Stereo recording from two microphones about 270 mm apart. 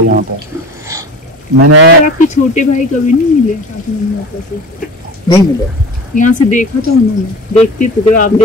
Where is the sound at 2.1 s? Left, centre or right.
Left.